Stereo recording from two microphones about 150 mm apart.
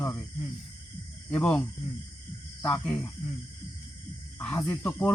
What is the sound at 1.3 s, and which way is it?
Speech, 10° left (ahead or behind).